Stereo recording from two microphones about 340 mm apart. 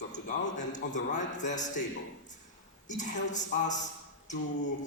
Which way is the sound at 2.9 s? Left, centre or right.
Left.